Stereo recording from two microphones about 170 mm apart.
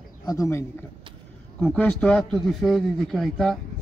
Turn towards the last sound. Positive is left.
turn(degrees=0)  # may be behind; listen again after turning